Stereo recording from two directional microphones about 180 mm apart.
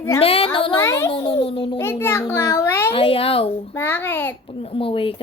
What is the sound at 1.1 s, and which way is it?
Speech, 30° left (ahead or behind).